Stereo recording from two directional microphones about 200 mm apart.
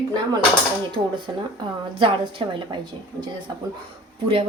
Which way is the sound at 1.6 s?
25° right (ahead or behind).